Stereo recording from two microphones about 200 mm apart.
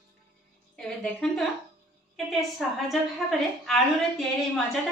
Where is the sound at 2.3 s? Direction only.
Centre (ahead or behind).